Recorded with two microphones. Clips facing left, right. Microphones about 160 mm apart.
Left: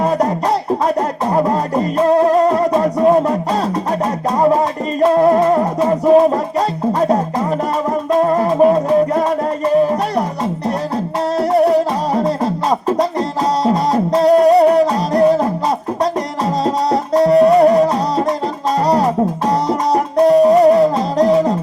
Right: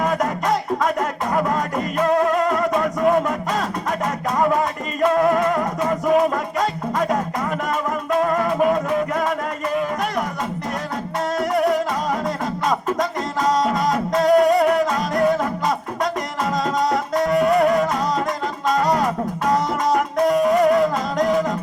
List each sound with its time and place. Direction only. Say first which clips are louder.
1.3 s music: left 6 dB; 35° left (ahead or behind)
4.4 s music: left 6 dB; 35° left (ahead or behind)
11.3 s music: left 7 dB; 35° left (ahead or behind)
13.7 s music: left 6 dB; 30° left (ahead or behind)
16.6 s music: left 5 dB; 35° left (ahead or behind)
18.9 s music: left 6 dB; 35° left (ahead or behind)